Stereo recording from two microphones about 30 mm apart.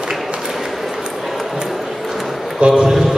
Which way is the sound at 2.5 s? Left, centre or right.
Right.